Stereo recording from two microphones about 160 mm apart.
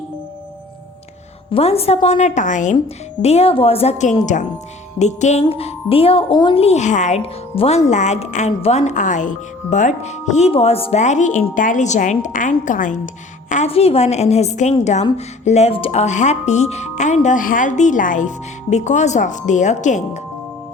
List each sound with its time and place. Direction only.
1.5 s speech: 40° left (ahead or behind)
2.7 s speech: 40° left (ahead or behind)
7.5 s speech: 35° left (ahead or behind); by 13.0 s 55° left (ahead or behind)
13.5 s speech: 45° left (ahead or behind)